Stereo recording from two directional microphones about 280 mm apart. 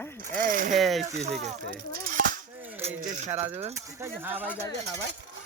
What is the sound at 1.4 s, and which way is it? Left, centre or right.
Speech, right.